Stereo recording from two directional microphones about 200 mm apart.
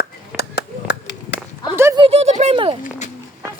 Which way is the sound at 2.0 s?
30° right (ahead or behind).